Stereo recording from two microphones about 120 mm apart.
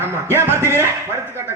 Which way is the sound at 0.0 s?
20° right (ahead or behind).